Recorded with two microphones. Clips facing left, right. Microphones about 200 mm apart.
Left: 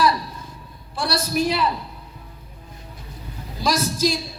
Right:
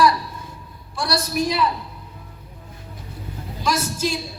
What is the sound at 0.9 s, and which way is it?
Speech, 30° left (ahead or behind).